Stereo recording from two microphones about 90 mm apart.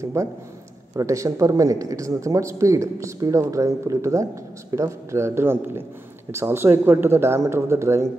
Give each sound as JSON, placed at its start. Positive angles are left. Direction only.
{"t": 0.0, "sound": "speech", "side_deg": -35}